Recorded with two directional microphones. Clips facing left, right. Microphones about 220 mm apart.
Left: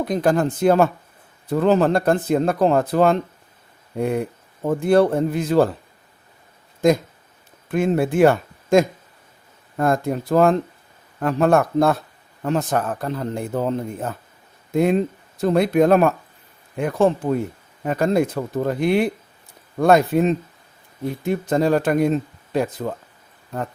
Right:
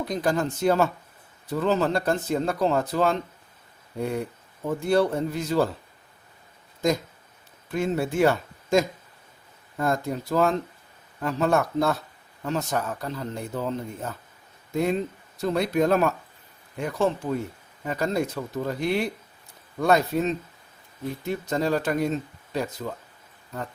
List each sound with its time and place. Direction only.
0.0 s speech: 55° left (ahead or behind)
7.7 s a man's voice: 55° left (ahead or behind)